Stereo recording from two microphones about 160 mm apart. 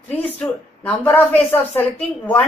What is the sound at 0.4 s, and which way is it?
A woman's voice, 10° left (ahead or behind).